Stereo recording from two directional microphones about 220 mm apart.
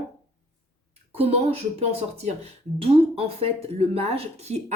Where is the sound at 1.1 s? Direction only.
25° right (ahead or behind).